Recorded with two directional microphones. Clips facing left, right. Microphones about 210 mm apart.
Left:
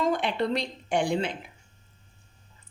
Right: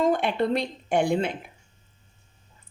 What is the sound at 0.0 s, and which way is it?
Speech, 50° right (ahead or behind).